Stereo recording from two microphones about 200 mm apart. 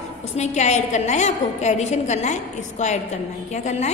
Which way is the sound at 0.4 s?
35° left (ahead or behind).